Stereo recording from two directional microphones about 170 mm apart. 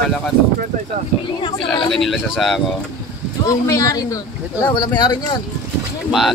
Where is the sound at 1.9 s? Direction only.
Centre (ahead or behind).